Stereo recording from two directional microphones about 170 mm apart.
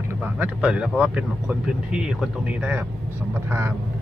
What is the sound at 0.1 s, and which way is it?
Speech, 10° right (ahead or behind).